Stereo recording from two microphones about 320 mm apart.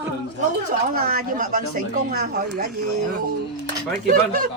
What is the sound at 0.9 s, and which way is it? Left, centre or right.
Speech, right.